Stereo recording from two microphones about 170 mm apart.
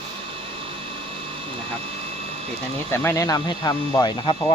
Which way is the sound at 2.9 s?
15° left (ahead or behind).